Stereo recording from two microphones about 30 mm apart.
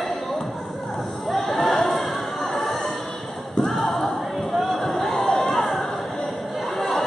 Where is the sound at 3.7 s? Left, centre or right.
Centre.